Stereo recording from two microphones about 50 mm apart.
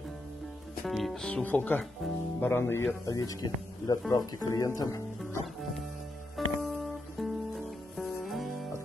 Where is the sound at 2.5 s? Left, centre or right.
Left.